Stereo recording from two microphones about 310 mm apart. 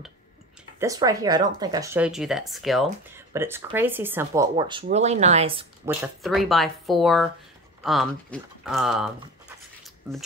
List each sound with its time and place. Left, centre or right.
0.7 s speech: centre
5.9 s speech: centre
9.8 s scissors: centre